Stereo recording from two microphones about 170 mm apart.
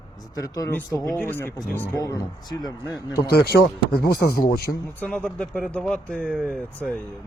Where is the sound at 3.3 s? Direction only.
70° left (ahead or behind).